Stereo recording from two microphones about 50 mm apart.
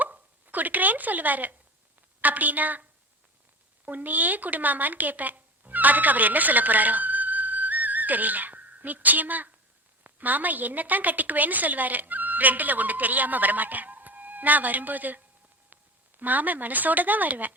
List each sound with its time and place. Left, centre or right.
0.0 s a sound: right
2.0 s a woman's voice: right
3.8 s a woman's voice: right